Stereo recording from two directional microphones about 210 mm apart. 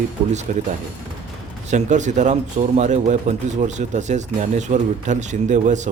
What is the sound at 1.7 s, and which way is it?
Speech, 35° right (ahead or behind).